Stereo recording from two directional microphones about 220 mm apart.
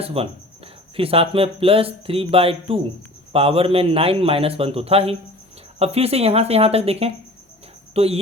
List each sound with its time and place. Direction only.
0.0 s speech: 25° right (ahead or behind)